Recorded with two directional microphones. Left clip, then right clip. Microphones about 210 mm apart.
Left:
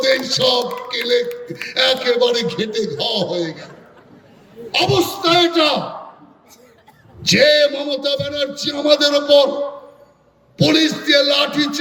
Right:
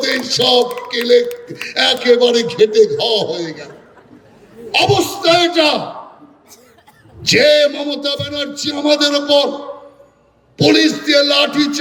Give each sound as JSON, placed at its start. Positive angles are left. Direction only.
{"t": 0.0, "sound": "a sound", "side_deg": -25}
{"t": 0.9, "sound": "a man's voice", "side_deg": -25}
{"t": 4.7, "sound": "a man's voice", "side_deg": -25}
{"t": 7.2, "sound": "a man's voice", "side_deg": -25}
{"t": 10.6, "sound": "a man's voice", "side_deg": -25}